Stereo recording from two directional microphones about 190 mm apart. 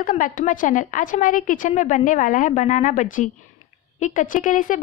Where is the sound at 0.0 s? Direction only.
45° left (ahead or behind).